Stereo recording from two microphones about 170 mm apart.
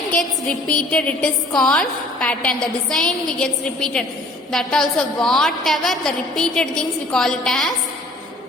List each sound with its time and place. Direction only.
0.7 s a woman's voice: 5° left (ahead or behind)